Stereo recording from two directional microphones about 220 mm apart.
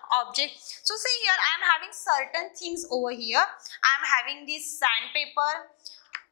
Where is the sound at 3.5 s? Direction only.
20° left (ahead or behind).